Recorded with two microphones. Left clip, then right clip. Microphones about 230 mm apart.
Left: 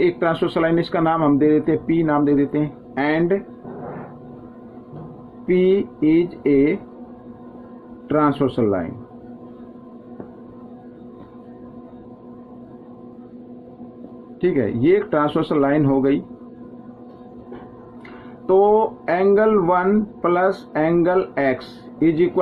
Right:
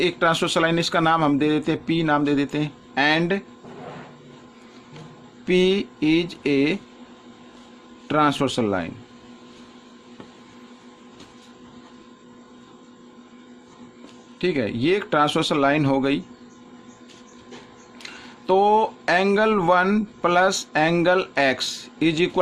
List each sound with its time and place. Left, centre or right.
0.0 s speech: right
5.5 s speech: right
8.0 s speech: right
14.4 s speech: right
18.6 s speech: right